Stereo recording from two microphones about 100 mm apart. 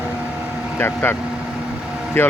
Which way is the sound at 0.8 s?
20° left (ahead or behind).